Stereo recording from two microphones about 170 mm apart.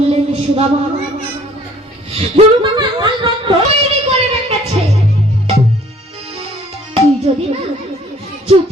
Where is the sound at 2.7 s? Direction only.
25° right (ahead or behind).